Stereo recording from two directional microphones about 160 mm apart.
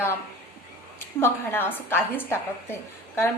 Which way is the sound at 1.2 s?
15° left (ahead or behind).